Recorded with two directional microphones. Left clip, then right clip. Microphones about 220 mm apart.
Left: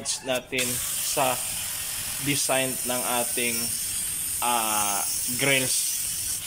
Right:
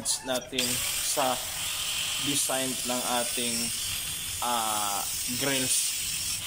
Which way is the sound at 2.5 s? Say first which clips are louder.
Left 4 dB; centre (ahead or behind).